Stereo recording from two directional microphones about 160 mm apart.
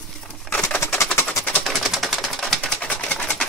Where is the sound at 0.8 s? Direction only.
20° left (ahead or behind).